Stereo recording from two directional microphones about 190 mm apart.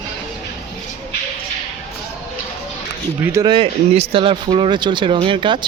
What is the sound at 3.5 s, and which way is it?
Speech, 30° right (ahead or behind).